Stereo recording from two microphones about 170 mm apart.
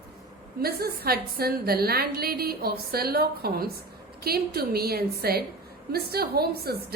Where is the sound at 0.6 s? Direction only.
65° right (ahead or behind).